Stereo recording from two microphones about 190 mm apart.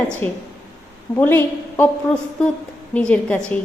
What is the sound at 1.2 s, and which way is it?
A woman's voice, 10° left (ahead or behind).